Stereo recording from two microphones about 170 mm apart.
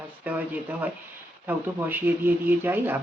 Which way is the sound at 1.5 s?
10° right (ahead or behind).